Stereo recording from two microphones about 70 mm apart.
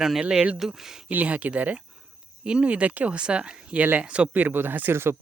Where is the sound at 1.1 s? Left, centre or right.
Right.